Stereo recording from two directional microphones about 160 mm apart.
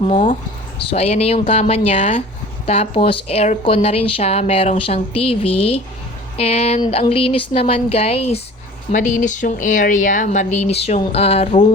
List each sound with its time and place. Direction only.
0.0 s speech: 40° left (ahead or behind)
8.9 s speech: 55° left (ahead or behind)